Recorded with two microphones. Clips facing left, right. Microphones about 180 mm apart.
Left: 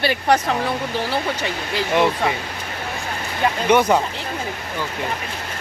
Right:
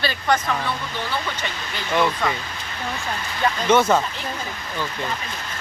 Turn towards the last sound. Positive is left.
turn(degrees=15)  # may be behind; listen again after turning